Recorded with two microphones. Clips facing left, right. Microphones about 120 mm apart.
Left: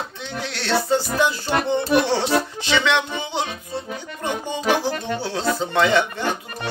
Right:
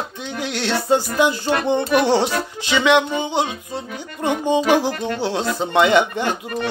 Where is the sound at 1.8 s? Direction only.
15° right (ahead or behind).